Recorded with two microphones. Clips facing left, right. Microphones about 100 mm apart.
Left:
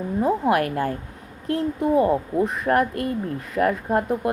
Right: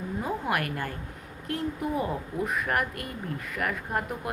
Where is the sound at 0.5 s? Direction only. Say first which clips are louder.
Left 8 dB; 40° left (ahead or behind).